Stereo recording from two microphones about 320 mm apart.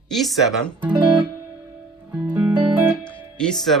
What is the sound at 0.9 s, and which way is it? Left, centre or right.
Speech, centre.